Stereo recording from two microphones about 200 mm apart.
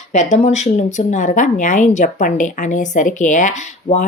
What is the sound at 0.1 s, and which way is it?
Speech, 35° left (ahead or behind).